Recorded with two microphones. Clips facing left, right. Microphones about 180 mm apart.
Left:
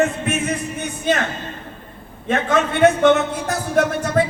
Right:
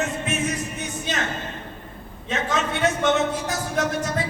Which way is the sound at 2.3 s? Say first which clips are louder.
Left 6 dB; 55° left (ahead or behind).